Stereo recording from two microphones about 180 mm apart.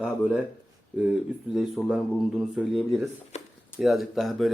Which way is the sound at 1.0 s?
5° right (ahead or behind).